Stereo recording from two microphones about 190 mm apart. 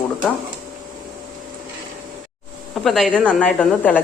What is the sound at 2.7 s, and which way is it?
Speech, centre (ahead or behind).